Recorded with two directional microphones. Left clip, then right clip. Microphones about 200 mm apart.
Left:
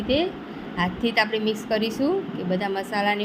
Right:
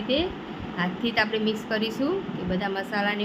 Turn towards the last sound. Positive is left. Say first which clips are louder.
# left 3 dB
turn(degrees=15)  # may be behind; listen again after turning